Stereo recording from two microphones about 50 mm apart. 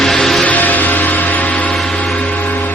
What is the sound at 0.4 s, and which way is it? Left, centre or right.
Music, left.